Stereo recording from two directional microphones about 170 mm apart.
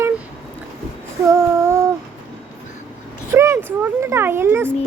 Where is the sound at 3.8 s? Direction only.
15° right (ahead or behind).